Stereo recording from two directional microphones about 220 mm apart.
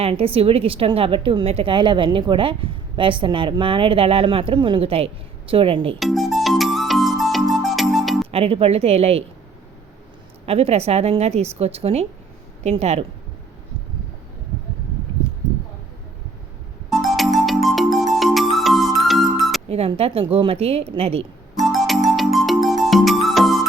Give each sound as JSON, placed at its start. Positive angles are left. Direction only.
{"t": 0.0, "sound": "a woman's voice", "side_deg": -25}
{"t": 6.0, "sound": "music", "side_deg": 0}
{"t": 8.3, "sound": "a woman's voice", "side_deg": -25}
{"t": 10.4, "sound": "a woman's voice", "side_deg": -25}
{"t": 16.9, "sound": "music", "side_deg": 0}
{"t": 19.6, "sound": "a woman's voice", "side_deg": -25}
{"t": 21.6, "sound": "music", "side_deg": 0}